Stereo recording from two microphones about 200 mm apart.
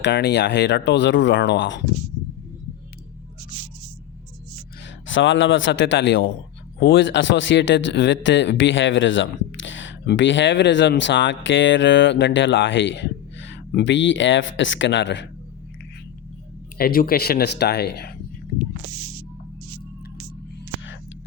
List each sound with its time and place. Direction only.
0.0 s a man's voice: 55° left (ahead or behind)
5.0 s a man's voice: 70° left (ahead or behind)
16.7 s speech: 50° left (ahead or behind)